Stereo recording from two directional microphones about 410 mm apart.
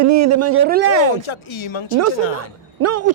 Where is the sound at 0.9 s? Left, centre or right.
Right.